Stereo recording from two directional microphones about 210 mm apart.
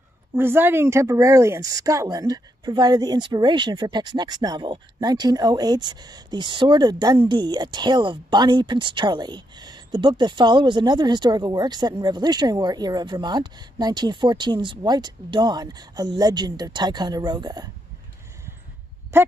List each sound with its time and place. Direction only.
0.4 s a woman's voice: 10° right (ahead or behind)
19.1 s speech: 15° right (ahead or behind)